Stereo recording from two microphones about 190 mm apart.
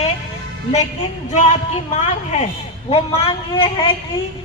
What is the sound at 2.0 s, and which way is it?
A man's voice, 35° left (ahead or behind).